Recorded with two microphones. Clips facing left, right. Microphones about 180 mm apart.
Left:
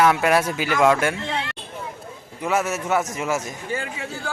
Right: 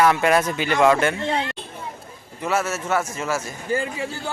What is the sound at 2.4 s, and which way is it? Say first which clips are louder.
Speech: left 1 dB; 15° left (ahead or behind).